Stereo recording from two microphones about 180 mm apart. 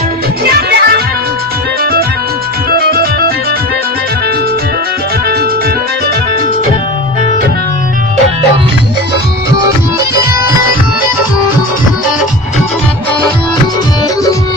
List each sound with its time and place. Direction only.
0.5 s music: 60° right (ahead or behind)